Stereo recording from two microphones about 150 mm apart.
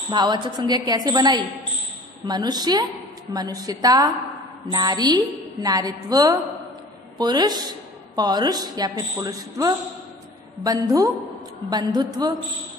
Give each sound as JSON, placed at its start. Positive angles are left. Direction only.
{"t": 0.1, "sound": "a woman's voice", "side_deg": -30}